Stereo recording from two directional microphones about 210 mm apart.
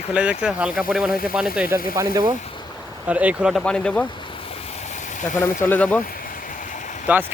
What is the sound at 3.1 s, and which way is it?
Speech, 5° right (ahead or behind).